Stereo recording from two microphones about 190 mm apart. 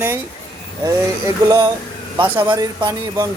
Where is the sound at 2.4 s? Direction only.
20° right (ahead or behind).